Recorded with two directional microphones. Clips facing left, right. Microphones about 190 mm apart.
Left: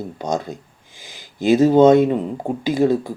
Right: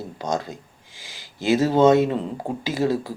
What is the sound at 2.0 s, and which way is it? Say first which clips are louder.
Speech: left 5 dB; 15° left (ahead or behind).